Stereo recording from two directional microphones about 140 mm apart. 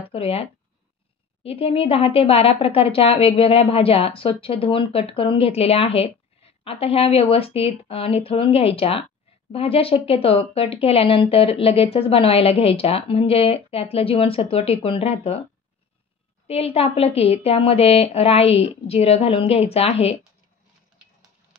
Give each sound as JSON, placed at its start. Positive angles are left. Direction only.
{"t": 0.1, "sound": "a woman's voice", "side_deg": 45}
{"t": 16.4, "sound": "a woman's voice", "side_deg": 45}